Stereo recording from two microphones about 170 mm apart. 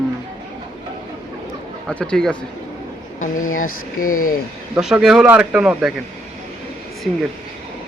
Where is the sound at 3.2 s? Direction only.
50° left (ahead or behind).